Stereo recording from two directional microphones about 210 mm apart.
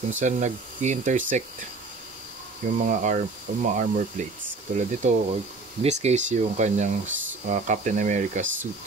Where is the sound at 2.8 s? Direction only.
35° right (ahead or behind).